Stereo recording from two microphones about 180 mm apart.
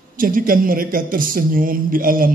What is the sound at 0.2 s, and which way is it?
A man's voice, 50° right (ahead or behind).